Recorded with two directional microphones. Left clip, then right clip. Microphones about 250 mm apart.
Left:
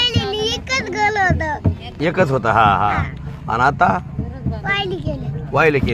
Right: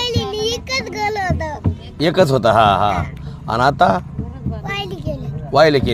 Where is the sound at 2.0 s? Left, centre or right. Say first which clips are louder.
Right 3 dB; right.